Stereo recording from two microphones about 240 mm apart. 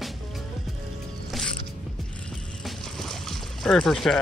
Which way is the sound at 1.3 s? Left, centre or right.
Centre.